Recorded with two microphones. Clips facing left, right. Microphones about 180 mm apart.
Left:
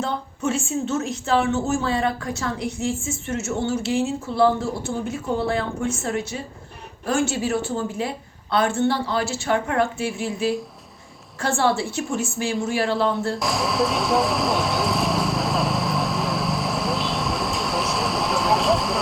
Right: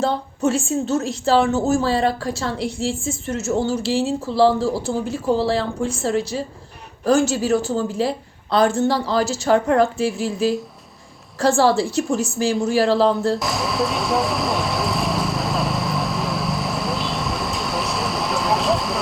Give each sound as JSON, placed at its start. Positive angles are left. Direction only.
{"t": 0.0, "sound": "a woman's voice", "side_deg": -35}
{"t": 13.4, "sound": "vehicle", "side_deg": 0}